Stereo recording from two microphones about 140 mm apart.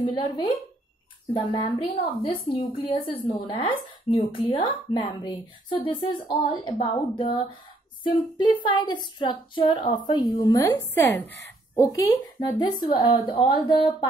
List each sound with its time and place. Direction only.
0.0 s a woman's voice: 35° left (ahead or behind)
1.6 s a woman's voice: 35° left (ahead or behind)